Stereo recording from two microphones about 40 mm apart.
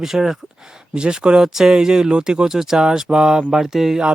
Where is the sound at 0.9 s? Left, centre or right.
Right.